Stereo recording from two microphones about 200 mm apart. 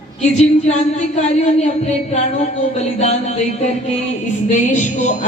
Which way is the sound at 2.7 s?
35° left (ahead or behind).